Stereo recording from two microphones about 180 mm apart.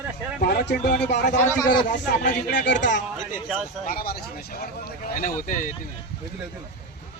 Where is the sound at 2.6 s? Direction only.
80° left.